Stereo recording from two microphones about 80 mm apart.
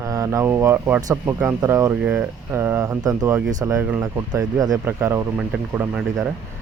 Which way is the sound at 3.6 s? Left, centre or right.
Right.